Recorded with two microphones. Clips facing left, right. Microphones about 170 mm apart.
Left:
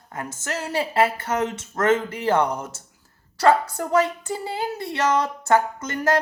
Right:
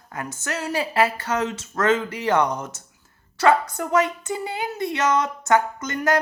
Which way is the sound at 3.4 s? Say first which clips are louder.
Even; 35° left (ahead or behind).